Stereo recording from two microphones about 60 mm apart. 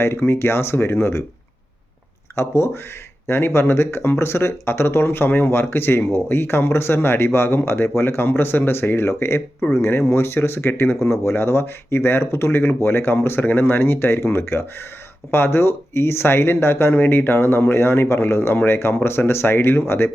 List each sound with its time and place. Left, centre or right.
0.0 s speech: left
2.3 s speech: left